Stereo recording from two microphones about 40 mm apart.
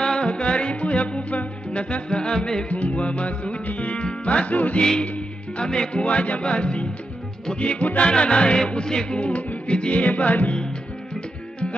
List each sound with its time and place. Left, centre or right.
0.0 s music: centre
2.7 s music: left
5.7 s music: left
6.0 s music: left
9.2 s music: left